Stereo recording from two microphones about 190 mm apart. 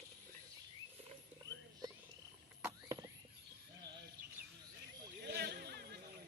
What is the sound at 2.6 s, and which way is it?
Rodents, 15° right (ahead or behind).